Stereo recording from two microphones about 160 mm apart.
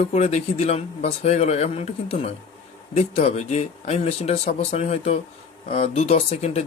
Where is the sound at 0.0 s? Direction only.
45° left (ahead or behind).